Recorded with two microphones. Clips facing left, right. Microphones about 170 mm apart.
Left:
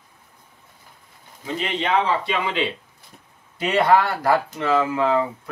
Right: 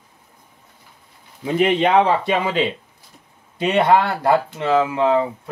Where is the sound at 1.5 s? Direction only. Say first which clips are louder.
Right 7 dB; 55° right (ahead or behind).